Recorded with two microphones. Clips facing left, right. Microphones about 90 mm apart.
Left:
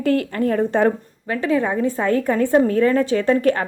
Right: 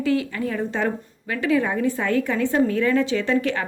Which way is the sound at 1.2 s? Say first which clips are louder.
Left 2 dB; 35° left (ahead or behind).